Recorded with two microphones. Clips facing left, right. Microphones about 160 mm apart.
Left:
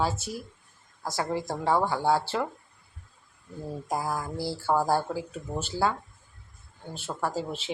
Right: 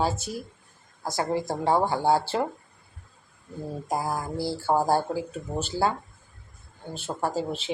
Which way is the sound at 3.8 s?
20° right (ahead or behind).